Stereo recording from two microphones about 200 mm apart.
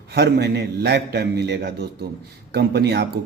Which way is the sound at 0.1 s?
55° right (ahead or behind).